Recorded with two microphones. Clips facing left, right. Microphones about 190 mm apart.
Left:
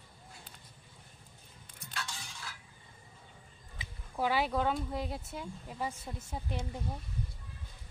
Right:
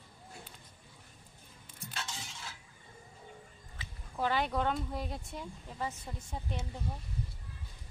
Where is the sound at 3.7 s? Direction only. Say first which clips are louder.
Left 2 dB; 10° left (ahead or behind).